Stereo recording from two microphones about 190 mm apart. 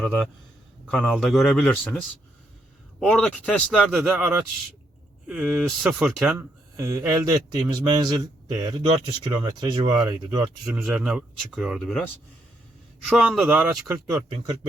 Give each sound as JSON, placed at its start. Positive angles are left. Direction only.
{"t": 0.0, "sound": "a man's voice", "side_deg": 0}
{"t": 6.3, "sound": "speech", "side_deg": -15}